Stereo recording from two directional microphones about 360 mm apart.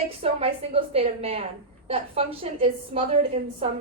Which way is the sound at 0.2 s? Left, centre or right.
Centre.